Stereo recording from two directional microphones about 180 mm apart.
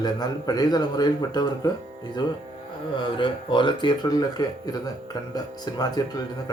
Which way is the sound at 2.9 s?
25° left (ahead or behind).